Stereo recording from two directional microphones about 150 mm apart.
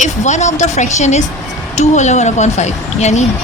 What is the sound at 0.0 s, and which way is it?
Speech, 50° left (ahead or behind).